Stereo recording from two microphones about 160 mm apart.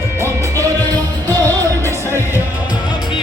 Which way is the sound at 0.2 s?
15° right (ahead or behind).